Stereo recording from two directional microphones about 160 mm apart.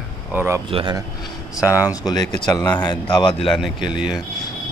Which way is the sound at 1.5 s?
10° right (ahead or behind).